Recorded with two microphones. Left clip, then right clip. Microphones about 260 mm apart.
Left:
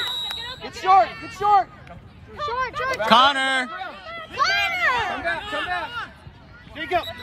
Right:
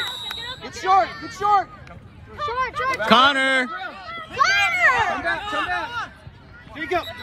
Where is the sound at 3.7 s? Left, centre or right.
Left.